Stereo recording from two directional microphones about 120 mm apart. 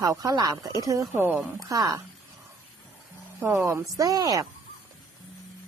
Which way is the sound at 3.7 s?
25° right (ahead or behind).